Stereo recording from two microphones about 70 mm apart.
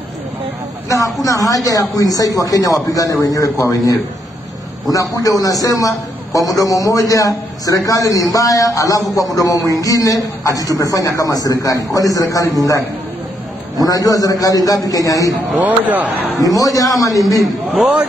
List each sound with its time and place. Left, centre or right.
0.8 s a man's voice: left
13.8 s a man's voice: left
15.6 s speech: right
16.3 s a man's voice: left